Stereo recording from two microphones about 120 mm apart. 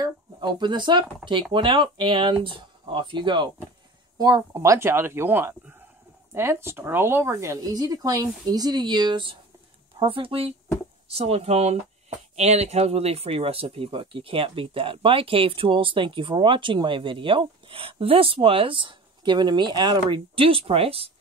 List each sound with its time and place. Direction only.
0.0 s speech: 40° right (ahead or behind)
4.2 s speech: 30° right (ahead or behind); by 21.1 s 50° right (ahead or behind)